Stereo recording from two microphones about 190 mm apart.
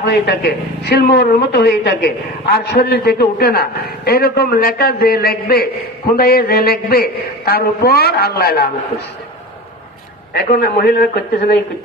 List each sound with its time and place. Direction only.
0.0 s a woman's voice: 60° left (ahead or behind)
10.3 s a woman's voice: 55° left (ahead or behind)